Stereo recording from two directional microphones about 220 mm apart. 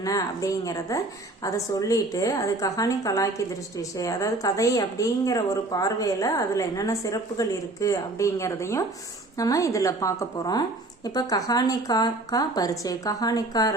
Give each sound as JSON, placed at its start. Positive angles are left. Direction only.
{"t": 0.0, "sound": "a woman's voice", "side_deg": 15}